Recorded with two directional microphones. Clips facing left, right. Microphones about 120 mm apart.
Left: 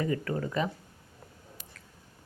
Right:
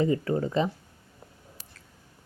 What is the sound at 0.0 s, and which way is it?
Speech, 25° right (ahead or behind).